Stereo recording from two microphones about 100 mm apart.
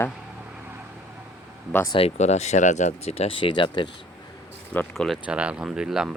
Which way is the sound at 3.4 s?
55° left (ahead or behind).